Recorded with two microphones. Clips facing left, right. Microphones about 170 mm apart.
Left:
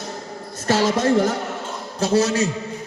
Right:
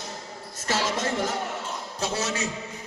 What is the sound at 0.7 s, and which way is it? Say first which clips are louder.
A man's voice: left 9 dB; 35° left (ahead or behind).